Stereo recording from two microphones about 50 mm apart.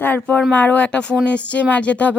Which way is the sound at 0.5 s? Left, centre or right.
Left.